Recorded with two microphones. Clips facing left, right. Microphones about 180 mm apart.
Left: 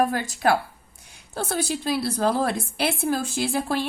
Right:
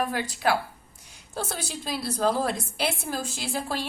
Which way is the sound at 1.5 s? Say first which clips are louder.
Left 8 dB; 60° left (ahead or behind).